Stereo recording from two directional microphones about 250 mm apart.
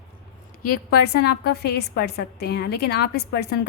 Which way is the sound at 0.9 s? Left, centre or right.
Left.